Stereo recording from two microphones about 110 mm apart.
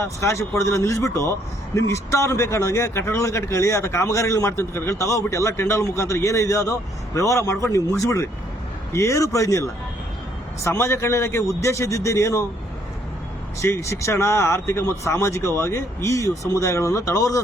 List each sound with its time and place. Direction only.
0.0 s a man's voice: 25° left (ahead or behind)
13.6 s a man's voice: 25° left (ahead or behind)